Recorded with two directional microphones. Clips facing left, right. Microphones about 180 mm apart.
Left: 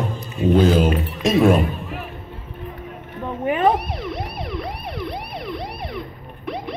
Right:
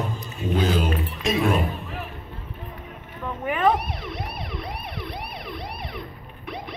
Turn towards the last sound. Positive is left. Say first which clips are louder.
# left 5 dB
turn(degrees=55)  # may be behind; listen again after turning